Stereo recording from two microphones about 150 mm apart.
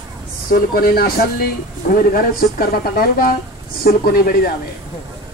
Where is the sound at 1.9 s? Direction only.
80° left.